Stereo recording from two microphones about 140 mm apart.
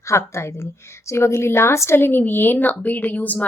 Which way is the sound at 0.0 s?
20° left (ahead or behind).